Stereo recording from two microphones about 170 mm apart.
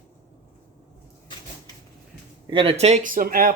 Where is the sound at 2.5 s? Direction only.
35° right (ahead or behind); by 3.5 s 60° right (ahead or behind).